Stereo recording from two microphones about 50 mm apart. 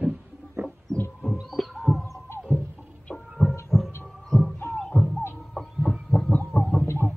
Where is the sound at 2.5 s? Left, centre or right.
Left.